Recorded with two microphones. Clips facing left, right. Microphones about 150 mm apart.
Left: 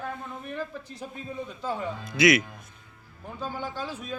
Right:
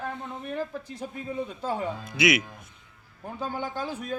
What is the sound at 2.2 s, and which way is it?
Speech, 10° right (ahead or behind).